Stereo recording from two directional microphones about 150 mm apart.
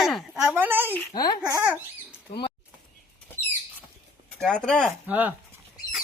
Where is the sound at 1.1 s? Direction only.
25° left (ahead or behind).